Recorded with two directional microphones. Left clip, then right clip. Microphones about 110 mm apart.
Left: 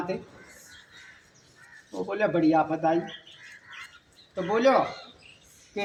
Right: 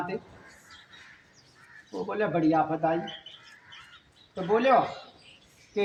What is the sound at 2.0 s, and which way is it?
Speech, 30° right (ahead or behind).